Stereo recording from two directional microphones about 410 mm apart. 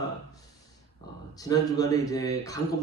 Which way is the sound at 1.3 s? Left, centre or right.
Centre.